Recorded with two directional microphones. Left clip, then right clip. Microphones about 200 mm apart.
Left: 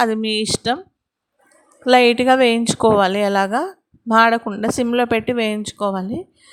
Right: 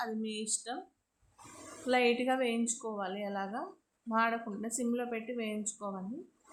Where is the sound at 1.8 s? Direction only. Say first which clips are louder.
Left 17 dB; 50° left (ahead or behind).